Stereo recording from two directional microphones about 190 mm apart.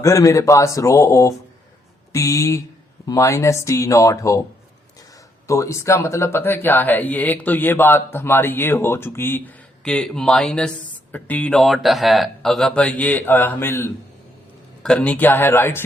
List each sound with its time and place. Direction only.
0.0 s speech: 15° left (ahead or behind)